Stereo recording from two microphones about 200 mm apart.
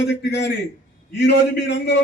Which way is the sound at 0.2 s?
60° left (ahead or behind).